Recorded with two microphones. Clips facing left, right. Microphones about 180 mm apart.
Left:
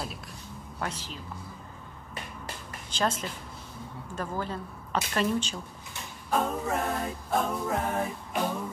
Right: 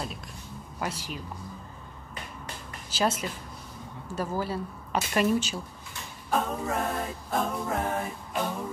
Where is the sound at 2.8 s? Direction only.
5° right (ahead or behind).